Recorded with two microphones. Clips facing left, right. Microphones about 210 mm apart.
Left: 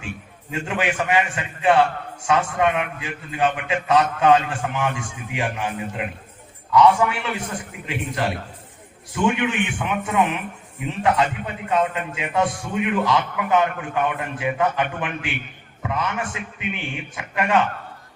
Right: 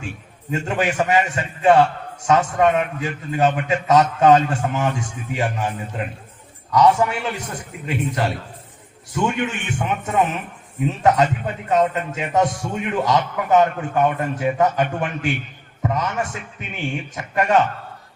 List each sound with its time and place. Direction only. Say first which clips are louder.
0.5 s a man's voice: right 3 dB; 40° right (ahead or behind)